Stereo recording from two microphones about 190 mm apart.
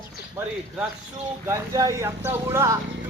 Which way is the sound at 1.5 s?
15° right (ahead or behind).